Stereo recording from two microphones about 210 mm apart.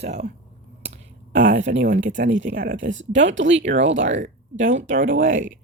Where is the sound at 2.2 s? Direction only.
60° right (ahead or behind).